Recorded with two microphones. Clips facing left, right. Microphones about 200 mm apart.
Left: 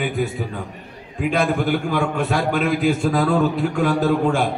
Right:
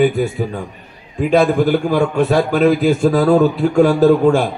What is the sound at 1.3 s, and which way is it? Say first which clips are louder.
A man's voice: right 8 dB; 40° right (ahead or behind).